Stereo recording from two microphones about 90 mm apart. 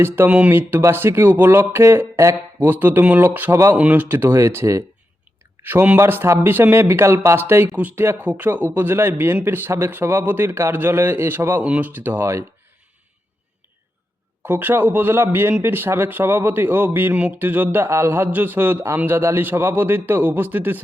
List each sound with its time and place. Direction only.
0.0 s speech: 20° right (ahead or behind)
0.5 s speech: 25° right (ahead or behind)
5.6 s speech: 20° right (ahead or behind)
14.4 s speech: 20° right (ahead or behind)